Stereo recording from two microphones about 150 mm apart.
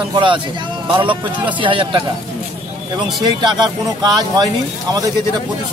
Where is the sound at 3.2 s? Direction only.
30° right (ahead or behind).